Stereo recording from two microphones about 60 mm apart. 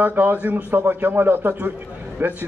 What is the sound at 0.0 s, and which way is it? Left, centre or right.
A man's voice, right.